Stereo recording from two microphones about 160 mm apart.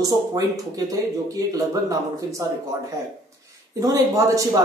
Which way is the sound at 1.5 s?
20° right (ahead or behind).